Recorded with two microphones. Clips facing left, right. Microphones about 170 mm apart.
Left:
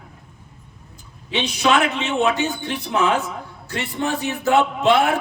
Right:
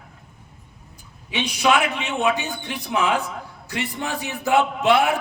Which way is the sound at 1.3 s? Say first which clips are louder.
Left 1 dB; 15° right (ahead or behind).